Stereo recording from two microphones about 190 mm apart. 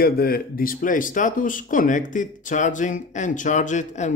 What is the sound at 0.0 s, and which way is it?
A man's voice, 50° left (ahead or behind).